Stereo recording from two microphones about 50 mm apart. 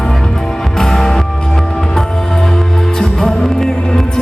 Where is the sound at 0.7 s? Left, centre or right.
Centre.